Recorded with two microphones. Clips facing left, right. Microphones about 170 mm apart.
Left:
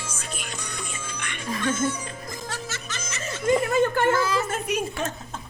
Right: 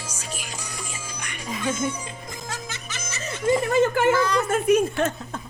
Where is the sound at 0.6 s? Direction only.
10° right (ahead or behind).